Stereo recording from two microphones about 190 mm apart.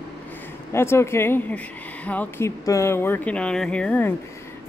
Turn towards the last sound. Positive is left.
turn(degrees=5)  # may be behind; listen again after turning